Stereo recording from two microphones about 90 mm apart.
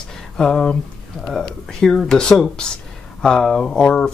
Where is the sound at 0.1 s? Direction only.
5° left (ahead or behind).